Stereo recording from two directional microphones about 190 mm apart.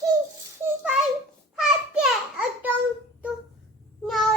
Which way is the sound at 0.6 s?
5° right (ahead or behind).